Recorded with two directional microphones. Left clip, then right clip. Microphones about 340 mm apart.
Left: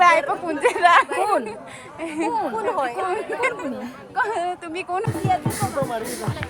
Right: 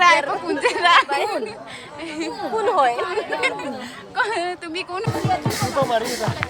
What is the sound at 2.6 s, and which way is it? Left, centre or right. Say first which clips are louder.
Speech: right 5 dB; right.